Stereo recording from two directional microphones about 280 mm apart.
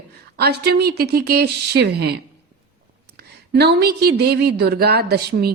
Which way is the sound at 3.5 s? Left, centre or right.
Right.